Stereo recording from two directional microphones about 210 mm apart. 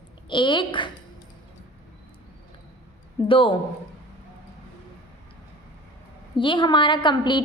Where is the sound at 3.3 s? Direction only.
25° left (ahead or behind).